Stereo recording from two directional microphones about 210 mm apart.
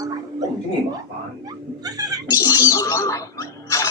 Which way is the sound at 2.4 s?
15° left (ahead or behind).